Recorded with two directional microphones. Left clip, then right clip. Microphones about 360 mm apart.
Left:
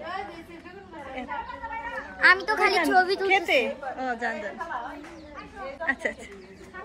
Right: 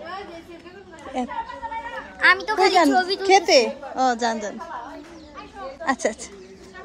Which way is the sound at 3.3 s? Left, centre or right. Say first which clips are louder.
Right 7 dB; centre.